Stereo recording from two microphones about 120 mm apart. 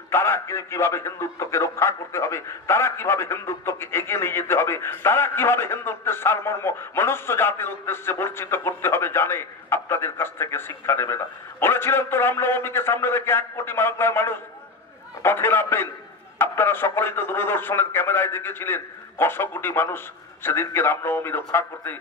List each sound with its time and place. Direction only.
0.1 s a man's voice: 20° left (ahead or behind)